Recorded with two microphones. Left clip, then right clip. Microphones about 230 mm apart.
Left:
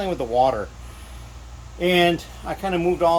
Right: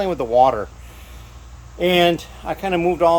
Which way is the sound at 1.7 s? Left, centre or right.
Centre.